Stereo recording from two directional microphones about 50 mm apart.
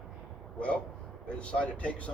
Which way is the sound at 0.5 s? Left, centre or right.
Left.